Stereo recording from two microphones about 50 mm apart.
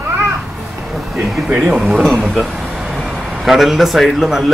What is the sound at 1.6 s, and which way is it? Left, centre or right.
A man's voice, centre.